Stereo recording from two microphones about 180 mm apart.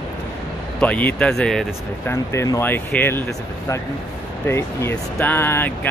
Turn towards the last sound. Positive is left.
turn(degrees=10)  # may be behind; listen again after turning